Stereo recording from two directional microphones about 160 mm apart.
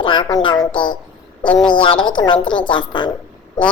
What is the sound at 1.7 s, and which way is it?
A woman's voice, 30° left (ahead or behind).